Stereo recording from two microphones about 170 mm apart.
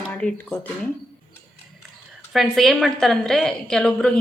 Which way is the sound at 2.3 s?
Centre (ahead or behind).